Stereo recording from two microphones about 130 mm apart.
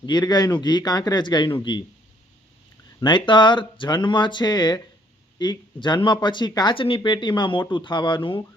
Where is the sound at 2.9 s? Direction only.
35° left (ahead or behind).